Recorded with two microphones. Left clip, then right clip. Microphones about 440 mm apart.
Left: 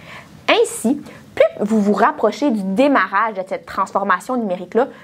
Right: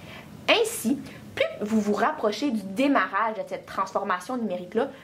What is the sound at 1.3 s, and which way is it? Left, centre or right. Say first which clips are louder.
Speech: left 11 dB; left.